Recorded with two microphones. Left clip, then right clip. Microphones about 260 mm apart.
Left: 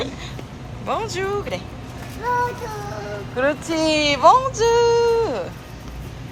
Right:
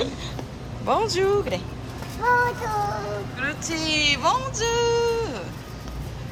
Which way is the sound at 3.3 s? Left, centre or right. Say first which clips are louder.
Left 11 dB; centre.